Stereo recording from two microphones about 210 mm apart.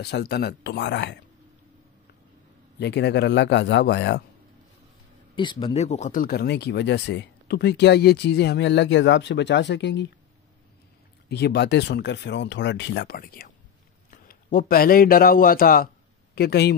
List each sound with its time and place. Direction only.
0.0 s speech: 50° left (ahead or behind)
2.8 s speech: 55° left (ahead or behind)
5.3 s speech: 20° left (ahead or behind); by 10.0 s 55° left (ahead or behind)
11.2 s speech: 55° left (ahead or behind)